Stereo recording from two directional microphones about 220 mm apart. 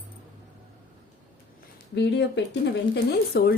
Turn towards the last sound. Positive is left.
turn(degrees=45)  # may be behind; listen again after turning